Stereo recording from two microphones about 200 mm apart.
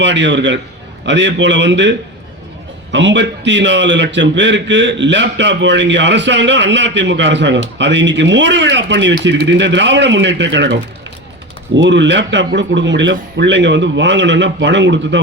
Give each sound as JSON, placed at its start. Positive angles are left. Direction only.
{"t": 0.0, "sound": "a man's voice", "side_deg": -65}